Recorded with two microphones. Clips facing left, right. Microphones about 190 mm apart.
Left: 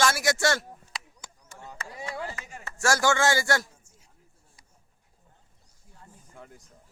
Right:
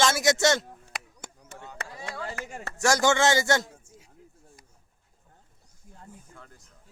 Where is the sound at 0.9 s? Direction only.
65° right (ahead or behind).